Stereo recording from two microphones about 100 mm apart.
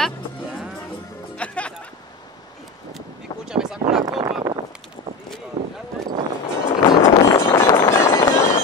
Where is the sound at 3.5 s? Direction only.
5° right (ahead or behind).